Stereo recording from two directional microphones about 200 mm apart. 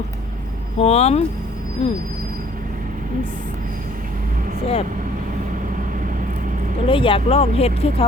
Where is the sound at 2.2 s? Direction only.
45° right (ahead or behind).